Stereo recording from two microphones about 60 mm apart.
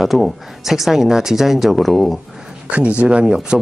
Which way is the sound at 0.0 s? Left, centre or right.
Centre.